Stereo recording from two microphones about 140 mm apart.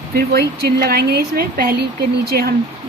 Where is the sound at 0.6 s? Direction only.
90° right.